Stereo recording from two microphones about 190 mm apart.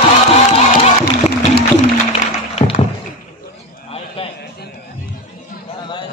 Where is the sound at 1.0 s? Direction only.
55° left (ahead or behind).